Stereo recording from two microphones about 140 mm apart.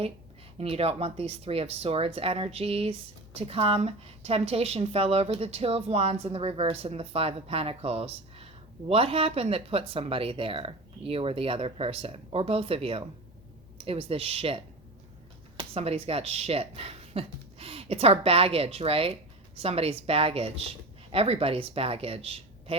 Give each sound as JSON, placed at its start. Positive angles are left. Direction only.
{"t": 0.6, "sound": "speech", "side_deg": -45}
{"t": 15.7, "sound": "speech", "side_deg": -45}